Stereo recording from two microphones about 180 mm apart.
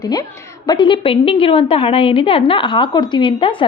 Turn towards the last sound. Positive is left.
turn(degrees=30)  # may be behind; listen again after turning